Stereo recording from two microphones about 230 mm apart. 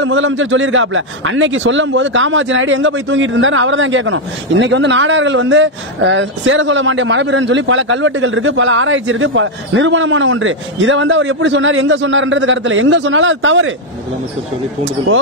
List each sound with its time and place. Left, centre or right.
0.0 s a man's voice: right